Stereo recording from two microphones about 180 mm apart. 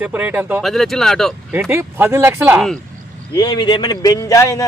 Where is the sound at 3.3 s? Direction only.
20° left (ahead or behind).